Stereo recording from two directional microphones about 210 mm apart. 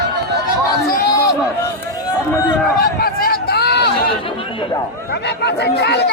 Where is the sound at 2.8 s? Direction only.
45° left (ahead or behind).